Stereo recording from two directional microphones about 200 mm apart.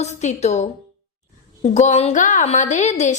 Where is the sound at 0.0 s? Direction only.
35° left (ahead or behind).